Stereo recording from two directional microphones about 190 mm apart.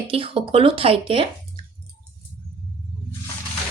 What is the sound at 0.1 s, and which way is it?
Speech, 30° right (ahead or behind).